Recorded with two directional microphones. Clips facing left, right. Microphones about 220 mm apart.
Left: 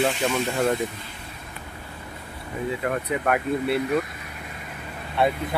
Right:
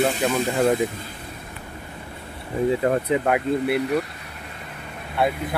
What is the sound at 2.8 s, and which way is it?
Speech, 25° right (ahead or behind).